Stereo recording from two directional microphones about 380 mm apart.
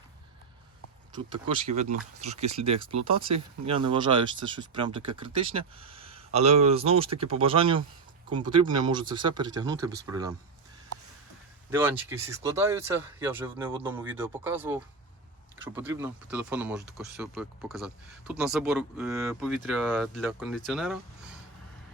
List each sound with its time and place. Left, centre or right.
1.1 s speech: centre
11.7 s speech: centre